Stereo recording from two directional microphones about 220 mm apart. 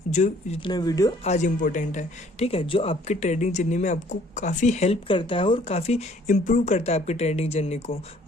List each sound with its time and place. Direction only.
0.1 s speech: 35° left (ahead or behind)
0.6 s speech: 20° left (ahead or behind)
1.2 s speech: 30° left (ahead or behind)